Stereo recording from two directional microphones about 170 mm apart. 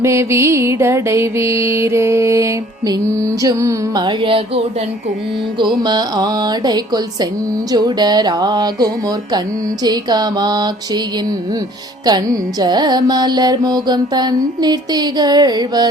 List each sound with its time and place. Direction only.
0.0 s music: 15° right (ahead or behind); by 4.6 s 30° right (ahead or behind)
5.5 s carnatic music: 25° right (ahead or behind)
12.0 s carnatic music: 25° right (ahead or behind)